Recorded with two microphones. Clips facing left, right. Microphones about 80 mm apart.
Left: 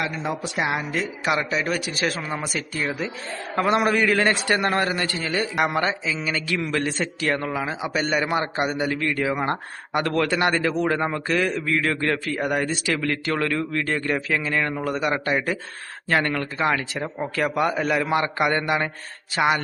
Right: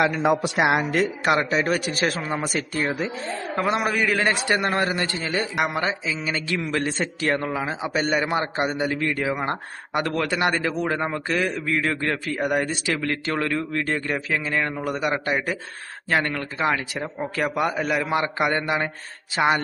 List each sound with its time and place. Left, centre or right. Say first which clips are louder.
0.0 s a man's voice: right 7 dB; right
0.4 s a woman's voice: right 5 dB; right
3.8 s a man's voice: left 3 dB; centre